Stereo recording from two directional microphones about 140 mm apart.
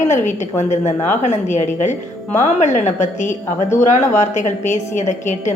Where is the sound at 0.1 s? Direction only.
55° left (ahead or behind).